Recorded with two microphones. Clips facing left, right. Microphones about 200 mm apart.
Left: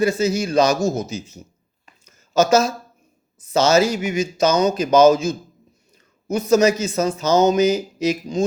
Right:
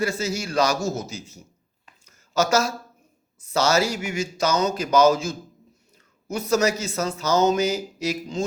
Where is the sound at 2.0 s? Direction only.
20° left (ahead or behind).